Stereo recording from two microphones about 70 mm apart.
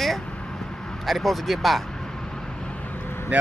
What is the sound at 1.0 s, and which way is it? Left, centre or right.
Speech, centre.